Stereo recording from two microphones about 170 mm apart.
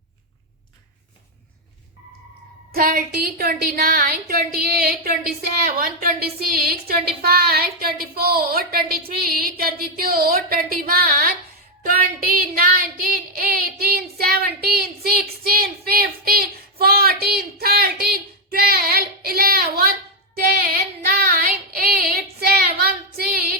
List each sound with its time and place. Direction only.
2.7 s a woman's voice: 55° right (ahead or behind)
11.8 s a sound: 60° right (ahead or behind)
21.1 s child singing: 60° right (ahead or behind)